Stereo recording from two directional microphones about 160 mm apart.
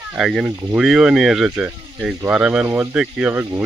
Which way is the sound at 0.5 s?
20° right (ahead or behind).